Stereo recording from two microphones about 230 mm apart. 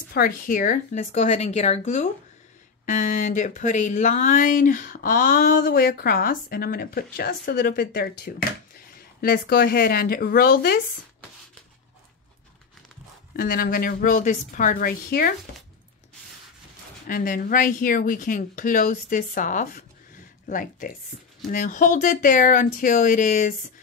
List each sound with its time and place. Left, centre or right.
0.1 s speech: left
13.4 s speech: left
17.1 s speech: left